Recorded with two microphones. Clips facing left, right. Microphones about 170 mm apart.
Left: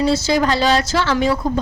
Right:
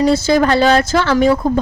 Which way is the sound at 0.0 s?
50° right (ahead or behind).